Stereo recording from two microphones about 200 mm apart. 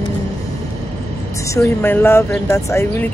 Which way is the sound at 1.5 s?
10° left (ahead or behind).